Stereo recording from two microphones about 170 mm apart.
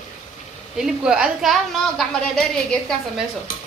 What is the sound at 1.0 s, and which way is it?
A woman's voice, 5° right (ahead or behind).